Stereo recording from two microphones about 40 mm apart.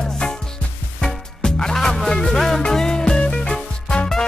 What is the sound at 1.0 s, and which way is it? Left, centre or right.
Music, centre.